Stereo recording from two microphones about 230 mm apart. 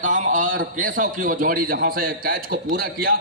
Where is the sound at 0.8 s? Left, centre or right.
Right.